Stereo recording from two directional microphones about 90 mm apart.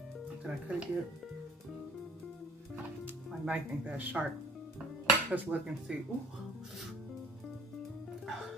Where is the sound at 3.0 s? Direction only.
15° right (ahead or behind).